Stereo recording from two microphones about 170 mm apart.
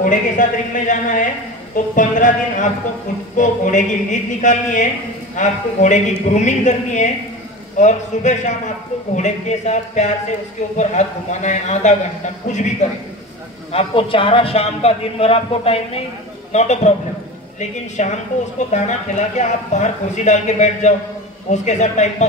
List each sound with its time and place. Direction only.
0.0 s a man's voice: 50° left (ahead or behind)